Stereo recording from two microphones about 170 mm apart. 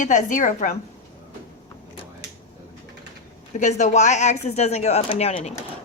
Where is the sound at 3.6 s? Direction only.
45° left (ahead or behind).